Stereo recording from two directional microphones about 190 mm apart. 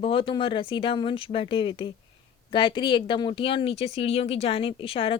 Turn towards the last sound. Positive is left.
turn(degrees=30)  # may be behind; listen again after turning